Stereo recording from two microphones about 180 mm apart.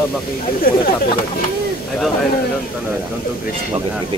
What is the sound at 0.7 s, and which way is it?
Speech, 55° left (ahead or behind).